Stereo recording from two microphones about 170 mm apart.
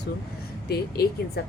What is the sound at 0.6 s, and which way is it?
Speech, 65° left (ahead or behind).